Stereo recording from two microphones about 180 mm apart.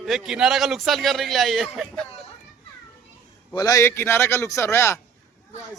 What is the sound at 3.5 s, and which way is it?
A man's voice, 20° left (ahead or behind).